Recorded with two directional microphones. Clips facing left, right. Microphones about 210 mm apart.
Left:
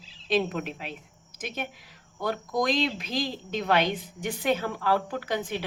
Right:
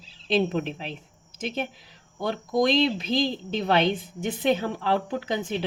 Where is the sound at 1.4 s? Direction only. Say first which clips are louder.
Right 5 dB; 25° right (ahead or behind).